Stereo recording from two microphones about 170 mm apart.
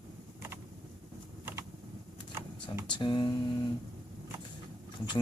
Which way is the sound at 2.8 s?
25° left (ahead or behind).